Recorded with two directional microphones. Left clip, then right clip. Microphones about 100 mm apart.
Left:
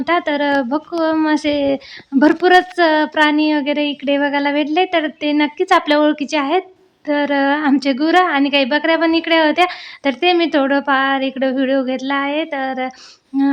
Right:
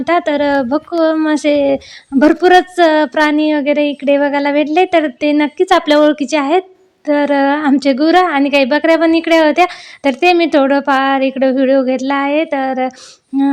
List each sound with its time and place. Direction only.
0.0 s a woman's voice: 30° right (ahead or behind)